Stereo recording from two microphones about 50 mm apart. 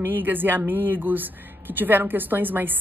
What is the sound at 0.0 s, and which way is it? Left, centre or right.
Speech, right.